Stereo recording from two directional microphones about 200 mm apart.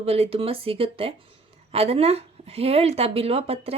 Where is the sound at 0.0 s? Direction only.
30° right (ahead or behind).